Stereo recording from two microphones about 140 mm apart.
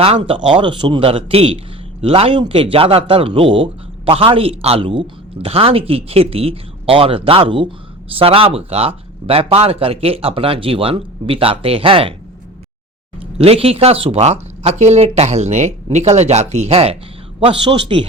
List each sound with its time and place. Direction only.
0.0 s a man's voice: 40° right (ahead or behind)
13.4 s a man's voice: 45° right (ahead or behind)